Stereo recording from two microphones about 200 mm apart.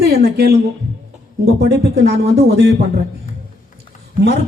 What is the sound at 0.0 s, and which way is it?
Speech, 55° right (ahead or behind).